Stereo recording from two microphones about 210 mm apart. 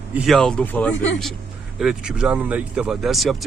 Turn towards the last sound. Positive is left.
turn(degrees=0)  # may be behind; listen again after turning